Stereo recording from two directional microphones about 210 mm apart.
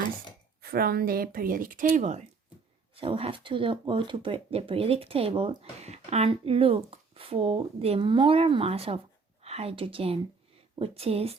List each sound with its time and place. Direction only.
0.6 s speech: 45° right (ahead or behind); by 11.3 s 30° right (ahead or behind)